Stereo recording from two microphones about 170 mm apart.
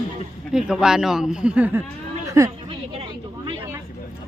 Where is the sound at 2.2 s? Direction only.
20° right (ahead or behind).